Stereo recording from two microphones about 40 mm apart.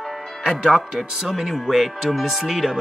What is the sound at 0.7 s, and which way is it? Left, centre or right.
Speech, centre.